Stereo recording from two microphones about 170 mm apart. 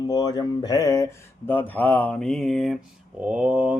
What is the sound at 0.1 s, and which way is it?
Speech, 25° left (ahead or behind).